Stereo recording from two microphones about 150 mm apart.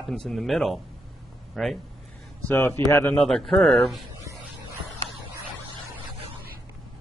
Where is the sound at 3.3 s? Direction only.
Centre (ahead or behind).